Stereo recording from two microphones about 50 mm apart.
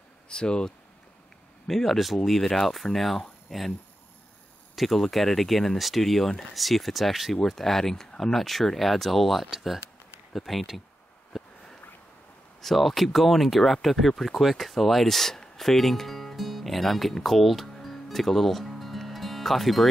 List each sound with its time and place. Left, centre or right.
0.3 s speech: centre
1.7 s speech: centre
4.7 s speech: centre
11.3 s a sound: centre
12.6 s speech: centre